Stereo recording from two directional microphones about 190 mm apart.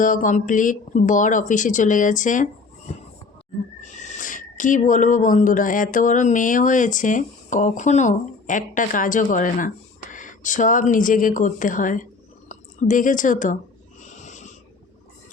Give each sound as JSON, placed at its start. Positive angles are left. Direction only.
{"t": 0.0, "sound": "speech", "side_deg": 45}
{"t": 14.0, "sound": "snort", "side_deg": 40}